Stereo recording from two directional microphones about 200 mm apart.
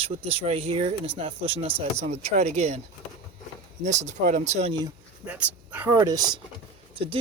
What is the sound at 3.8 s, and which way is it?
Speech, 35° right (ahead or behind).